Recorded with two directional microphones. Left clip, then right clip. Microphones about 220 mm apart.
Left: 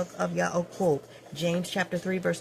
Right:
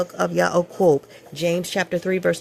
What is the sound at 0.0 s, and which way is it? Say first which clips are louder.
Speech: right 8 dB; 40° right (ahead or behind).